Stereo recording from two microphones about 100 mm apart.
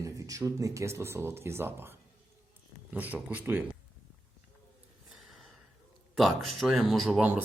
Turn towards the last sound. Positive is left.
turn(degrees=0)  # may be behind; listen again after turning